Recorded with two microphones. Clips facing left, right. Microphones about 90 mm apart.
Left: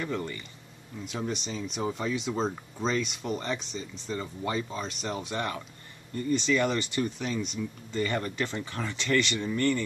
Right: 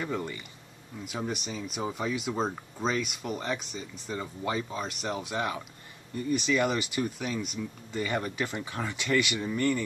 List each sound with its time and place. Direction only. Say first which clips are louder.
0.0 s speech: even; 10° right (ahead or behind)